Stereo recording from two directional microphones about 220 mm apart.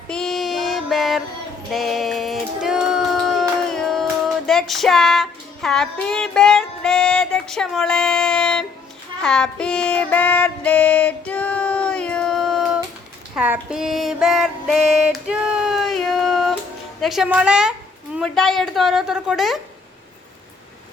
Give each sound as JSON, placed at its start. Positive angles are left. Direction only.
{"t": 0.1, "sound": "female singing", "side_deg": 0}
{"t": 1.7, "sound": "a sound", "side_deg": 0}
{"t": 3.7, "sound": "music", "side_deg": 0}
{"t": 4.4, "sound": "child singing", "side_deg": 0}
{"t": 13.3, "sound": "female singing", "side_deg": -5}
{"t": 17.0, "sound": "child singing", "side_deg": 0}